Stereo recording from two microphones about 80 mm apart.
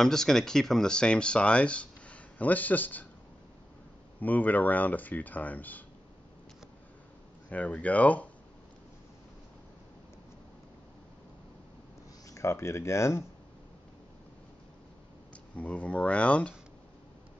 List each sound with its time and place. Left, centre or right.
0.0 s speech: centre; by 3.1 s left
4.2 s speech: left
7.4 s speech: centre
12.3 s speech: left
15.5 s speech: centre